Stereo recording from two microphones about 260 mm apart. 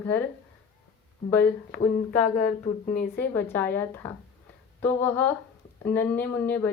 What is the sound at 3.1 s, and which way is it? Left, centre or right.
Speech, centre.